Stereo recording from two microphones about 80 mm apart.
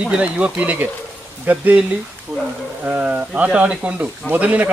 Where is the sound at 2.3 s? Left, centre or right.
Centre.